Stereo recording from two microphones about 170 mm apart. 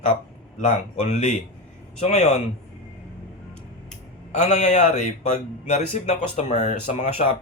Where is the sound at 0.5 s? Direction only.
45° left (ahead or behind).